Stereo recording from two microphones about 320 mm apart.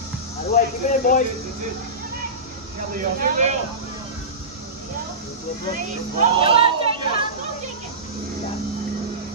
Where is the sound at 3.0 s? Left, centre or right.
Right.